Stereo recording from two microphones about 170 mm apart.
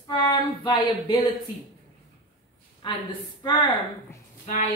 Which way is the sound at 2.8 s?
30° left (ahead or behind).